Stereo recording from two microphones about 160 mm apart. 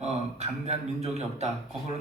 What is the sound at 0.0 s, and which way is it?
A man's voice, 40° right (ahead or behind).